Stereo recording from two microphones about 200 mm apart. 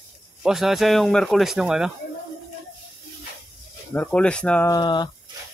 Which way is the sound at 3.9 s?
5° left (ahead or behind).